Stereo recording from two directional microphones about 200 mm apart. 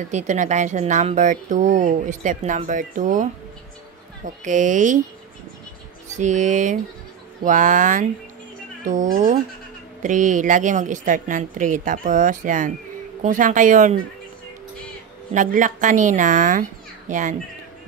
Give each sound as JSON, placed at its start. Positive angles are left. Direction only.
{"t": 0.1, "sound": "a woman's voice", "side_deg": -35}
{"t": 6.1, "sound": "a woman's voice", "side_deg": -35}
{"t": 15.3, "sound": "a woman's voice", "side_deg": -40}